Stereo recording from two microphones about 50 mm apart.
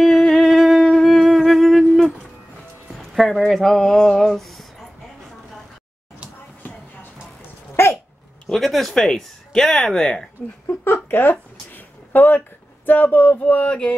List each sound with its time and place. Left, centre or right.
0.2 s wind instrument: centre
1.0 s music: centre
3.2 s speech: centre
7.8 s a sound: left
8.5 s speech: centre
10.8 s speech: left